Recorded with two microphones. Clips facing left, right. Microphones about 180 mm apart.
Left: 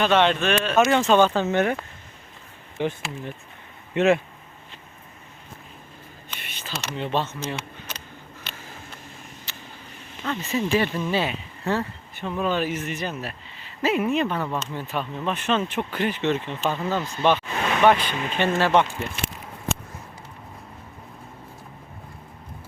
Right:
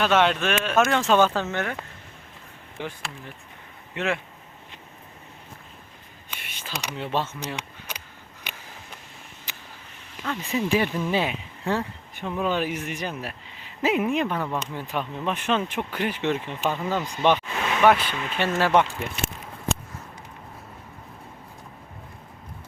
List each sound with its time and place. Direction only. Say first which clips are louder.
0.0 s speech: left 1 dB; 5° right (ahead or behind)
1.5 s speech: left 7 dB; 20° left (ahead or behind)
2.8 s speech: left 7 dB; 20° left (ahead or behind)
6.3 s speech: left 1 dB; 10° right (ahead or behind)
8.5 s a sound: right 1 dB; 15° right (ahead or behind)
9.5 s vehicle: right 2 dB; 15° right (ahead or behind)
10.4 s speech: even; 10° right (ahead or behind)